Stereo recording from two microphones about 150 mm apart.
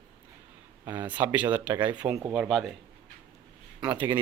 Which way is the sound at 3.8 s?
10° right (ahead or behind).